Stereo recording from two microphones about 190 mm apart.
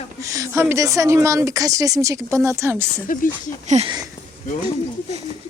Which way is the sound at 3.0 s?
45° left (ahead or behind).